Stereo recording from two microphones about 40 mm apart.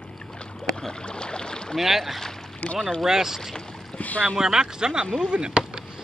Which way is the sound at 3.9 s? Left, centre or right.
Left.